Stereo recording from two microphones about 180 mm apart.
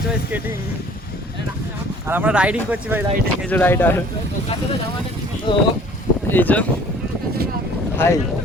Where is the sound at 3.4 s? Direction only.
10° left (ahead or behind).